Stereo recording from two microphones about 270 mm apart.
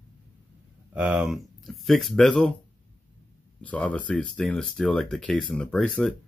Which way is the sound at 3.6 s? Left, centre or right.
Centre.